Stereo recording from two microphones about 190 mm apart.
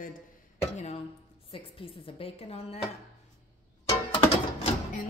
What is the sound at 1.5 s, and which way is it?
A woman's voice, 30° left (ahead or behind).